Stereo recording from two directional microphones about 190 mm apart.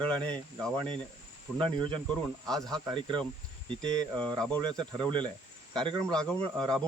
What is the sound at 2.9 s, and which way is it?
Speech, 25° right (ahead or behind).